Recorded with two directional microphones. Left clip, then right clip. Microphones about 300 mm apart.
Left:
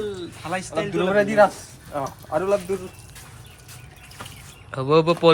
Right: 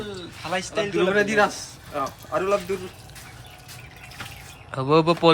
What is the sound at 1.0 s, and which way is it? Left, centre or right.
Speech, left.